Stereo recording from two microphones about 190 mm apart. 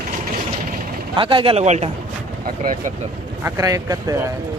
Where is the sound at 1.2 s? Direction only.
25° right (ahead or behind).